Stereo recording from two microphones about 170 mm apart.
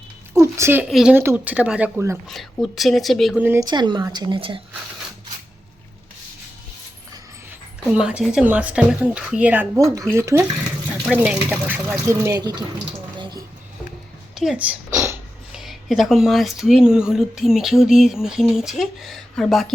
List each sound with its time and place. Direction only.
0.3 s a sound: 15° right (ahead or behind)
0.9 s speech: centre (ahead or behind)
1.1 s speech: 15° right (ahead or behind)
2.2 s speech: centre (ahead or behind)
3.4 s speech: 15° right (ahead or behind)
3.7 s a woman's voice: 25° right (ahead or behind)
7.9 s a woman's voice: 5° right (ahead or behind); by 12.6 s 25° right (ahead or behind)
13.1 s a sound: 25° right (ahead or behind)
14.3 s speech: 5° right (ahead or behind)
15.5 s speech: centre (ahead or behind)